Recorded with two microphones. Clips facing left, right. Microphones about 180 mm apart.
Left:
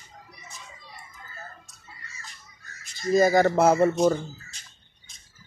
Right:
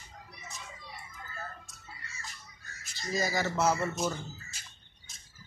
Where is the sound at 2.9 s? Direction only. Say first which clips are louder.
Left 13 dB; 55° left (ahead or behind).